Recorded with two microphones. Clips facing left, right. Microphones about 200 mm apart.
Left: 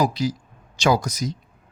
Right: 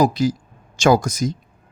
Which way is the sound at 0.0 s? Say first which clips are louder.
Right 5 dB; 50° right (ahead or behind).